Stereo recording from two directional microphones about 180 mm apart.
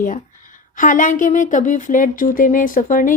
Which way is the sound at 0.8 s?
45° left (ahead or behind).